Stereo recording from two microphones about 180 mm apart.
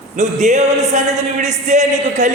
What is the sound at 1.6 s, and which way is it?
Speech, 45° right (ahead or behind).